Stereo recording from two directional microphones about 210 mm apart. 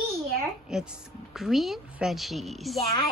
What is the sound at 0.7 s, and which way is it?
A woman's voice, 5° right (ahead or behind).